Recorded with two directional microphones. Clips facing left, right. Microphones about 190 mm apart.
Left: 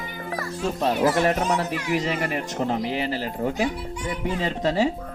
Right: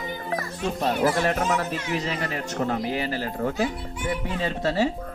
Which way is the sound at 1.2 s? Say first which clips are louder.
Left 2 dB; 15° left (ahead or behind).